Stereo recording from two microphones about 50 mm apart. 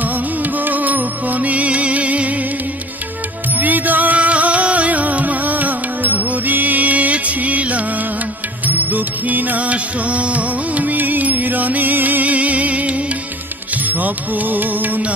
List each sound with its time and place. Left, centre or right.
0.0 s music: right
3.5 s music: right